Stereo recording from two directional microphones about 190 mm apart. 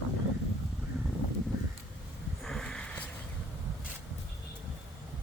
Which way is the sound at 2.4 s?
Centre (ahead or behind).